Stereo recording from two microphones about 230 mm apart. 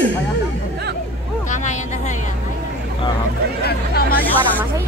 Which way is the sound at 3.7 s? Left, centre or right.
Left.